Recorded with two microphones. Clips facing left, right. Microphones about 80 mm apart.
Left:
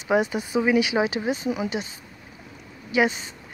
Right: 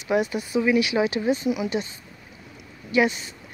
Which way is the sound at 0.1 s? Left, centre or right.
Left.